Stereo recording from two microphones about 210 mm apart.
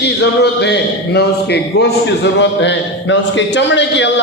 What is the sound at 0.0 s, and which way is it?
A man's voice, 55° left (ahead or behind).